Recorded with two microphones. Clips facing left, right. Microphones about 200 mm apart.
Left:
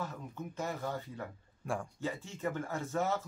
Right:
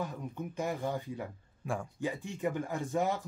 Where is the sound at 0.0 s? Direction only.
15° right (ahead or behind).